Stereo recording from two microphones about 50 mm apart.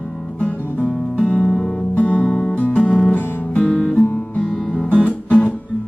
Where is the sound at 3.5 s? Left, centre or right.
Centre.